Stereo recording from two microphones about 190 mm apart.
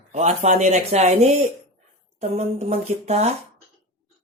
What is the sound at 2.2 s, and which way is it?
Speech, 35° right (ahead or behind).